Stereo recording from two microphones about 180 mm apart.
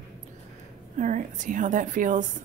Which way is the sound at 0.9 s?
45° right (ahead or behind).